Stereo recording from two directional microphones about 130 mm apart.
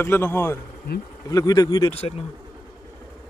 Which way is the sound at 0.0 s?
15° left (ahead or behind).